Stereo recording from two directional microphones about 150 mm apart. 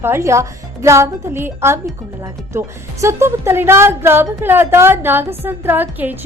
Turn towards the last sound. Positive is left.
turn(degrees=-15)  # may be behind; listen again after turning